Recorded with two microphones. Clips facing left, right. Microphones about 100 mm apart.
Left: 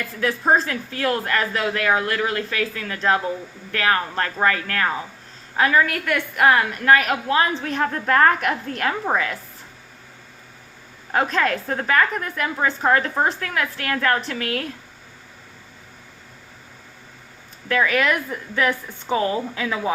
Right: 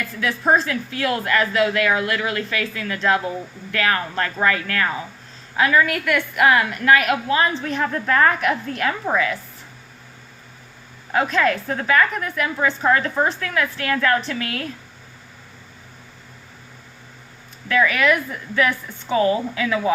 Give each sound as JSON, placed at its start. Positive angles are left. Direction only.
{"t": 0.2, "sound": "a woman's voice", "side_deg": 40}
{"t": 7.3, "sound": "a woman's voice", "side_deg": 45}
{"t": 11.1, "sound": "a woman's voice", "side_deg": 40}
{"t": 13.5, "sound": "a woman's voice", "side_deg": 50}
{"t": 17.7, "sound": "a woman's voice", "side_deg": 30}